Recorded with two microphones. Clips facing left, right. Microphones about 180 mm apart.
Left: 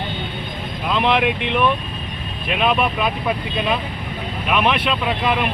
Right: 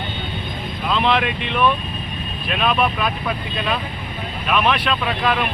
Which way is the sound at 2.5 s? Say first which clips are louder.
Left 1 dB; 15° left (ahead or behind).